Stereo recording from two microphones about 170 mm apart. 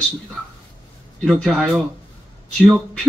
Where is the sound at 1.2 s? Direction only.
Centre (ahead or behind).